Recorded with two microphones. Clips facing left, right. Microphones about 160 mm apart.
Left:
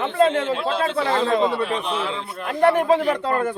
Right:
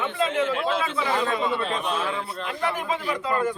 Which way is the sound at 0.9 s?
60° left (ahead or behind).